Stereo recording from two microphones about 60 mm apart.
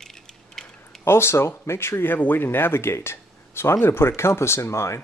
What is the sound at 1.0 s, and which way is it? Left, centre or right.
Speech, left.